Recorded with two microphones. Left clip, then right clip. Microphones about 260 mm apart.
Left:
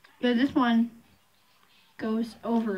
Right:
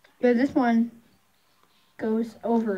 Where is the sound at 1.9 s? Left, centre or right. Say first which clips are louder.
Right 4 dB; centre.